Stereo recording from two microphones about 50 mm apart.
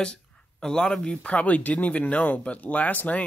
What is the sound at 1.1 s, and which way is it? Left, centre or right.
Speech, left.